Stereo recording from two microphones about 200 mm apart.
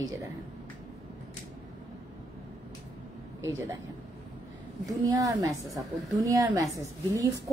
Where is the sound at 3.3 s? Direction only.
15° right (ahead or behind).